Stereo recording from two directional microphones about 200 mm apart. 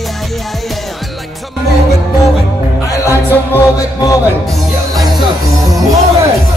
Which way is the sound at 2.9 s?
15° left (ahead or behind).